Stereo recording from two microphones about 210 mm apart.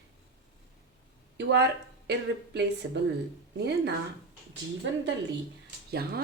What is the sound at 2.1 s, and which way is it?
Speech, 55° right (ahead or behind).